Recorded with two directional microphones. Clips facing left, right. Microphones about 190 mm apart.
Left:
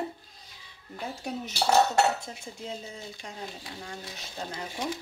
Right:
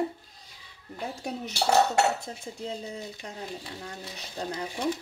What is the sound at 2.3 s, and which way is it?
A woman's voice, 35° right (ahead or behind).